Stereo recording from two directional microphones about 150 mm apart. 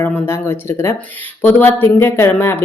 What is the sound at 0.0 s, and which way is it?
A woman's voice, 15° left (ahead or behind).